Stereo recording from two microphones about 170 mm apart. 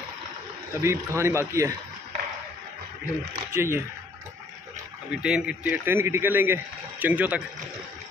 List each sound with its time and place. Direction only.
0.7 s a man's voice: 15° right (ahead or behind)
3.5 s a man's voice: 15° right (ahead or behind)
5.1 s a man's voice: 5° right (ahead or behind)